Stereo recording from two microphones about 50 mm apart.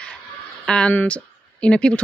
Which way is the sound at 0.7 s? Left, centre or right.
Centre.